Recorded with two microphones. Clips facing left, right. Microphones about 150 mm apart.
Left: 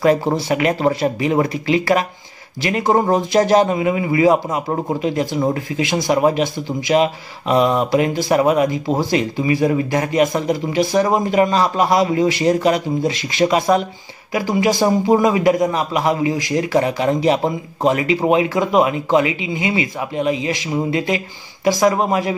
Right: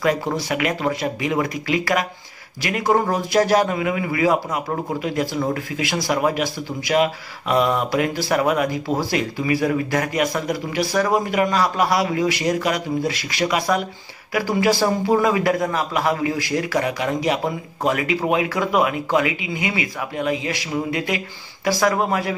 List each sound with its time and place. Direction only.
0.0 s a man's voice: 30° left (ahead or behind)